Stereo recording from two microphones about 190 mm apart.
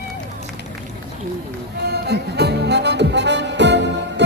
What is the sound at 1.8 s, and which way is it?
Music, 60° right (ahead or behind).